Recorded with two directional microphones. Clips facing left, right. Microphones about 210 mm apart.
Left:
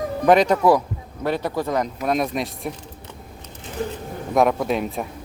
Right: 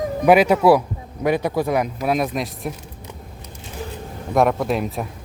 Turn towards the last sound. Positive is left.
turn(degrees=0)  # may be behind; listen again after turning